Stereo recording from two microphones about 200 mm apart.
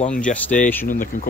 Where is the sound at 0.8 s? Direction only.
45° left (ahead or behind).